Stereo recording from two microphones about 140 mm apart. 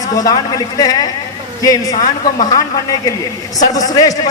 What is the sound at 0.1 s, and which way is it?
A man's voice, 25° left (ahead or behind).